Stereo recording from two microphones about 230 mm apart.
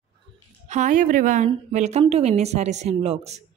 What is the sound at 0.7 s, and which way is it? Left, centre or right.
A woman's voice, right.